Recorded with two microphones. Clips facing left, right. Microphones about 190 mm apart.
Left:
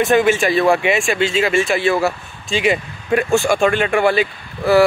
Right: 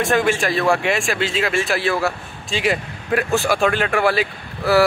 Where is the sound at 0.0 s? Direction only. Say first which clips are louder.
Left 4 dB; centre (ahead or behind).